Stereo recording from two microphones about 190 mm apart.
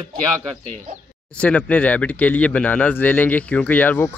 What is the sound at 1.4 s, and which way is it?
A man's voice, 5° left (ahead or behind).